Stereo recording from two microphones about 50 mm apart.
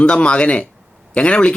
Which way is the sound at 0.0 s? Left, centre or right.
Left.